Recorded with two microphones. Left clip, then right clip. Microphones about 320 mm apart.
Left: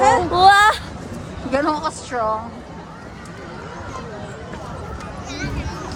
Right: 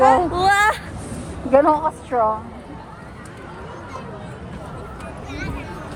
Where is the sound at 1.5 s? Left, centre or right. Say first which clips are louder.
Right 5 dB; centre.